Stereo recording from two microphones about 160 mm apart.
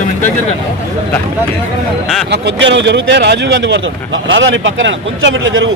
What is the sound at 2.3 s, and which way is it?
A man's voice, 90° right.